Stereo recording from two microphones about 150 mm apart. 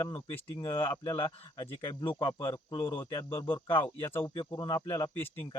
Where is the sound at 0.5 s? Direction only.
30° left (ahead or behind).